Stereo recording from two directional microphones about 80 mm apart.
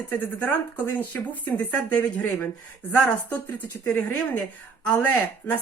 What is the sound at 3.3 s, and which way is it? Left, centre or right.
Speech, left.